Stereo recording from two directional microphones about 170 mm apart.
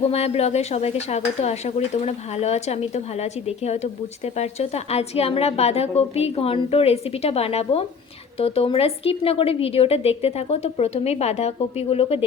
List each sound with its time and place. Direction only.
0.1 s a woman's voice: 40° left (ahead or behind)